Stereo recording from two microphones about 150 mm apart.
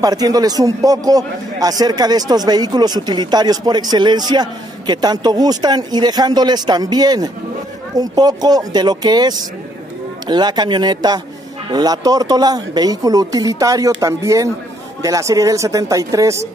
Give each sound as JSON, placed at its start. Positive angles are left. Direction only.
{"t": 0.0, "sound": "a man's voice", "side_deg": -25}